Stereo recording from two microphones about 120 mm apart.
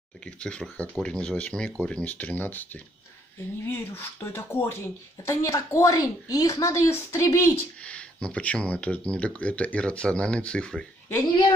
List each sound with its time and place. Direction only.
0.4 s speech: 10° left (ahead or behind)
7.8 s speech: 10° left (ahead or behind)